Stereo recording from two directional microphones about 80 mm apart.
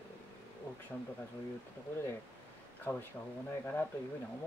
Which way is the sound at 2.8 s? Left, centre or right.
Left.